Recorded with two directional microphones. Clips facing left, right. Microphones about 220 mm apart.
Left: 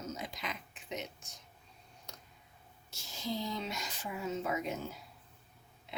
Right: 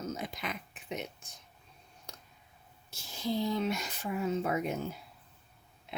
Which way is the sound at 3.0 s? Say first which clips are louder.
Right 5 dB; 55° right (ahead or behind).